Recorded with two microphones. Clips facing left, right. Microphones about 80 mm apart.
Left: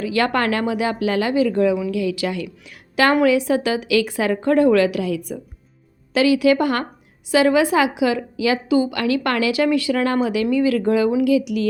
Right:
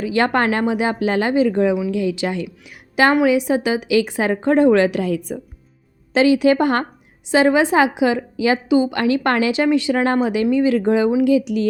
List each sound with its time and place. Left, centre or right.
0.0 s a woman's voice: right